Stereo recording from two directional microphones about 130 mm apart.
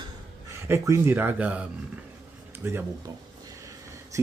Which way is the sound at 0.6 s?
20° right (ahead or behind).